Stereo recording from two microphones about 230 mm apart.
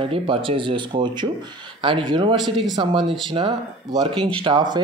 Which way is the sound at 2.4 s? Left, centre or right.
Centre.